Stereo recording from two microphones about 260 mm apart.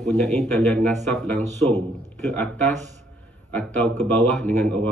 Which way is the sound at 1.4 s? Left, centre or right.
Right.